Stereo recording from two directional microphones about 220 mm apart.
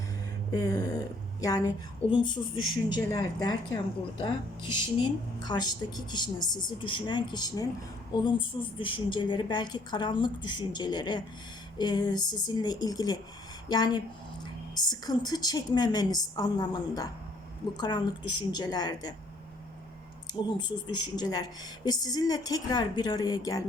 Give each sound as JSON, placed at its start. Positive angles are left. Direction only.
{"t": 0.5, "sound": "a woman's voice", "side_deg": 15}
{"t": 20.6, "sound": "a woman's voice", "side_deg": 20}